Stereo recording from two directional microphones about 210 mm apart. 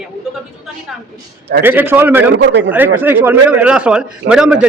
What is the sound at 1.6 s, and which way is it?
Speech, 10° right (ahead or behind).